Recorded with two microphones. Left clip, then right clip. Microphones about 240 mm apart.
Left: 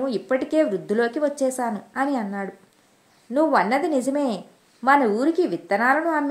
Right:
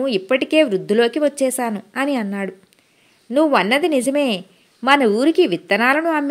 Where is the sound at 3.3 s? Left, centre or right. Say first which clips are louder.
Right 4 dB; right.